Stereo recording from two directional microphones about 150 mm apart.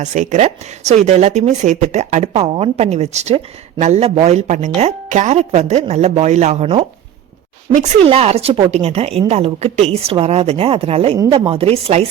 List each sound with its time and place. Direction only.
0.0 s speech: 55° right (ahead or behind)
8.0 s a woman's voice: 40° right (ahead or behind)